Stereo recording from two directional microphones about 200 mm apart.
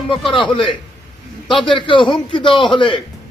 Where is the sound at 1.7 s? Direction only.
25° left (ahead or behind).